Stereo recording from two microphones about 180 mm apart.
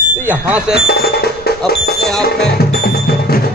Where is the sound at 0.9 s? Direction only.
60° left (ahead or behind).